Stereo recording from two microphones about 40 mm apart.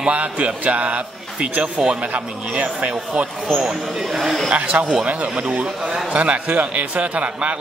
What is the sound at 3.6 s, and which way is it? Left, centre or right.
Speech, centre.